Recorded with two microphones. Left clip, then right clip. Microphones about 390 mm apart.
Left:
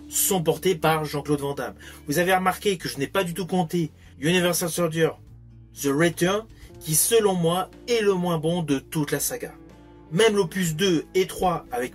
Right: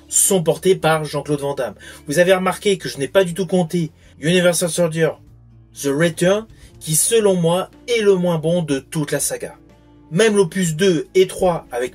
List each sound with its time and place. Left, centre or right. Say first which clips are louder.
0.1 s speech: right 6 dB; left